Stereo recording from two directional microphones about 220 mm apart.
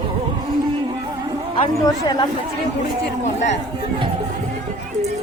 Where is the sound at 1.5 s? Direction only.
20° left (ahead or behind).